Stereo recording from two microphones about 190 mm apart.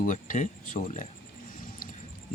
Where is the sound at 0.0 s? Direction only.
45° left (ahead or behind).